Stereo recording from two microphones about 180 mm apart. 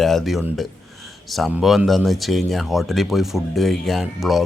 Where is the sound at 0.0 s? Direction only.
Centre (ahead or behind).